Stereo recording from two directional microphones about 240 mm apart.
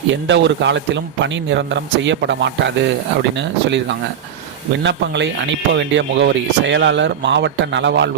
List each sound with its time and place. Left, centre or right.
0.3 s speech: right